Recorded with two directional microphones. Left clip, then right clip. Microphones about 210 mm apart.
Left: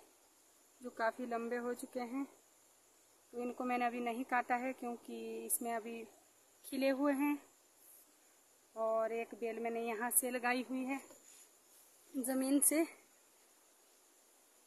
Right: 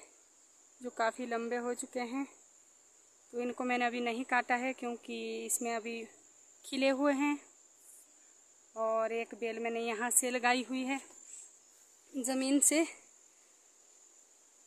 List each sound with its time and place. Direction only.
0.8 s speech: 30° right (ahead or behind)
3.3 s speech: 30° right (ahead or behind)
8.7 s speech: 30° right (ahead or behind)
12.2 s speech: 30° right (ahead or behind)